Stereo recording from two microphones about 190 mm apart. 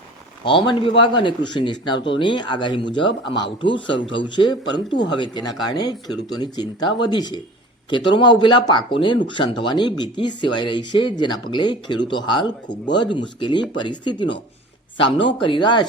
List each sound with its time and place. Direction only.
0.4 s speech: 25° left (ahead or behind)